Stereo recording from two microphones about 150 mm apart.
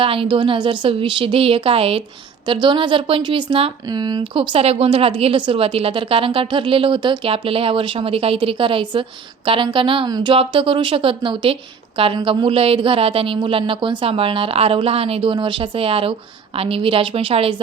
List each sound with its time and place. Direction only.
0.0 s speech: 35° right (ahead or behind)